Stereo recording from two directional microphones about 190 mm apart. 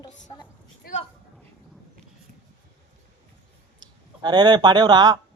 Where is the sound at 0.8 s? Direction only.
40° left (ahead or behind).